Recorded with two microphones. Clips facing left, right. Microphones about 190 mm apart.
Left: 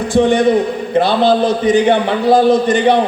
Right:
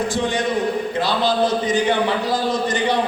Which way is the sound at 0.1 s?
60° left (ahead or behind).